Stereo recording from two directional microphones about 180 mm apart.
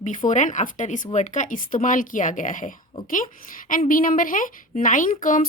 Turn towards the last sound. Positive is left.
turn(degrees=50)  # may be behind; listen again after turning